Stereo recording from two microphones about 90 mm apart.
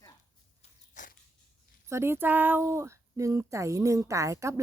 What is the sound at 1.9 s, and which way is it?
Speech, 30° right (ahead or behind).